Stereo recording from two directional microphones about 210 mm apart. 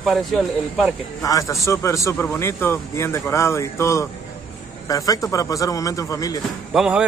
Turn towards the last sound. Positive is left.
turn(degrees=-5)  # may be behind; listen again after turning